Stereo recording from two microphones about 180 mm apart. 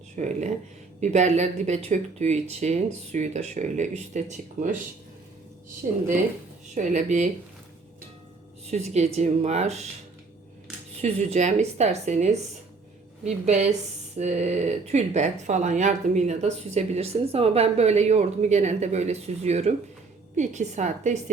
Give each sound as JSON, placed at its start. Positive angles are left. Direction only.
{"t": 0.2, "sound": "speech", "side_deg": -40}
{"t": 6.7, "sound": "speech", "side_deg": -40}
{"t": 8.7, "sound": "speech", "side_deg": -40}
{"t": 11.0, "sound": "speech", "side_deg": -40}